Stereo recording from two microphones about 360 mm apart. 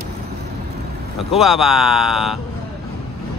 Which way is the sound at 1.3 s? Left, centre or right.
Centre.